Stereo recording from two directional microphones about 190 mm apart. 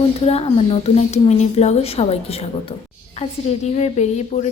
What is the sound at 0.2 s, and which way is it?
A woman's voice, 35° left (ahead or behind).